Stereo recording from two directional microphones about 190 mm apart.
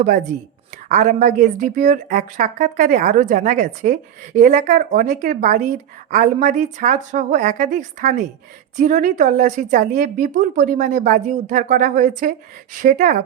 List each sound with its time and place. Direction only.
0.0 s a woman's voice: 45° right (ahead or behind)